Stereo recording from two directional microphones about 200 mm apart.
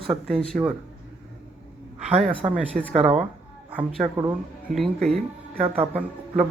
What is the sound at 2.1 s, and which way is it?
Speech, 30° right (ahead or behind).